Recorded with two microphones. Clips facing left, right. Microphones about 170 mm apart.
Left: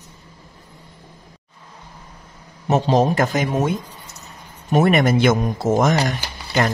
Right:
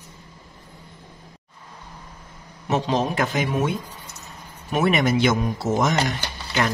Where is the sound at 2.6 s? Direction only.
40° left (ahead or behind).